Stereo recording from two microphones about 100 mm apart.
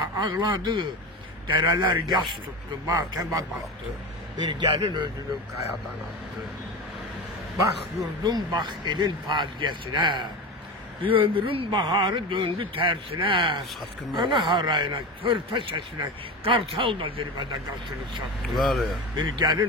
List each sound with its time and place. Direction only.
0.2 s a man's voice: 50° right (ahead or behind)
4.5 s a man's voice: 50° right (ahead or behind)
8.2 s a man's voice: 45° right (ahead or behind)
11.0 s speech: 65° right (ahead or behind)
11.8 s a man's voice: 45° right (ahead or behind)
18.4 s speech: centre (ahead or behind)
19.1 s a man's voice: 45° right (ahead or behind)